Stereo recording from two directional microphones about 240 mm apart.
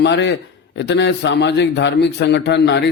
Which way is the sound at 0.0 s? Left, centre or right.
Left.